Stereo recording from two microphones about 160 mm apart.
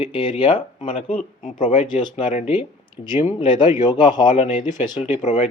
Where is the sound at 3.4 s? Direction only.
30° left (ahead or behind).